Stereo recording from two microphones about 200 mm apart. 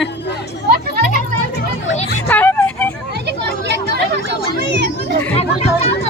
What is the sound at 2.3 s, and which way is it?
Vehicle, 10° left (ahead or behind).